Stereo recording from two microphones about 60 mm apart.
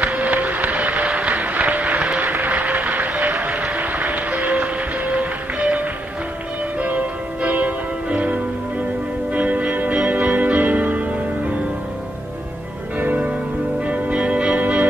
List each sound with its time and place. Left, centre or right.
0.0 s music: right
2.2 s a sound: right
3.7 s music: right
6.8 s change ringing: right
9.3 s music: right
13.0 s music: right